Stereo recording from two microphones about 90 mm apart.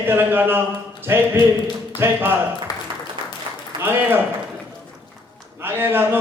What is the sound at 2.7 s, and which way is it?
Applause, 40° left (ahead or behind).